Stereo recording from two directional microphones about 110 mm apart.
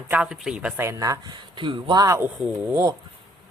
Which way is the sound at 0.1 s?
10° right (ahead or behind).